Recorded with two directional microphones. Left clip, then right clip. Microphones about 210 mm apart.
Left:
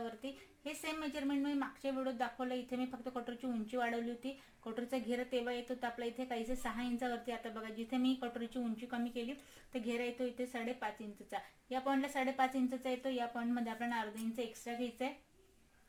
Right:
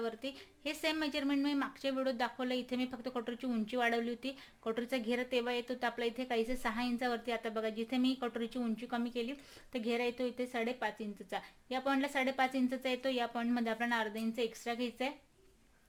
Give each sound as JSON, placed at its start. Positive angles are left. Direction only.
{"t": 0.2, "sound": "a woman's voice", "side_deg": -50}